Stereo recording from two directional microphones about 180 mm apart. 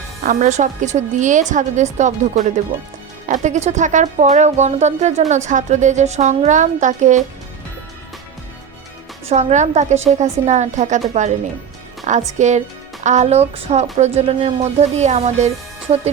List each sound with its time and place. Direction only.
0.2 s a woman's voice: 45° right (ahead or behind)
9.2 s a woman's voice: 40° right (ahead or behind)